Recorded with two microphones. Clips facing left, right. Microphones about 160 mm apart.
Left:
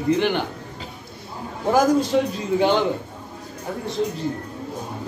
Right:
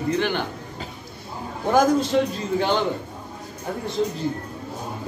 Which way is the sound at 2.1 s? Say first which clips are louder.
Left 1 dB; 5° left (ahead or behind).